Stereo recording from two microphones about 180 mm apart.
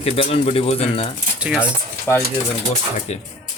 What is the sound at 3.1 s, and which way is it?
Speech, 35° left (ahead or behind).